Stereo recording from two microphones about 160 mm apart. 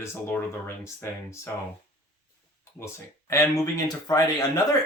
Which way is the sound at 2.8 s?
15° left (ahead or behind).